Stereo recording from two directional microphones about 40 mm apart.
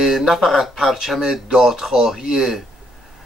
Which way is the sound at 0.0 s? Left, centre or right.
Centre.